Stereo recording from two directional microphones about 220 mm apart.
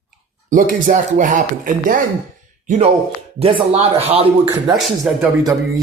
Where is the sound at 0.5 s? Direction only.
35° right (ahead or behind).